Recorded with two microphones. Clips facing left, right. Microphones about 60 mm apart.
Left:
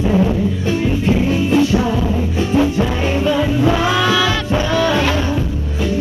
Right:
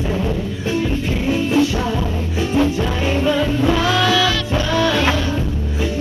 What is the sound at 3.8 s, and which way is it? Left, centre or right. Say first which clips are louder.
Music: left 1 dB; left.